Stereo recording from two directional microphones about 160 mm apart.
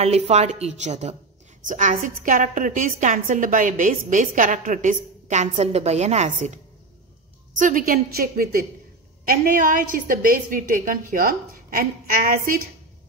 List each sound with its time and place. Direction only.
0.0 s a woman's voice: 45° right (ahead or behind)
7.5 s a woman's voice: 55° right (ahead or behind)